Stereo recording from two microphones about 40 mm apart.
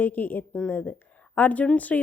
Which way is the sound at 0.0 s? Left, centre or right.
Left.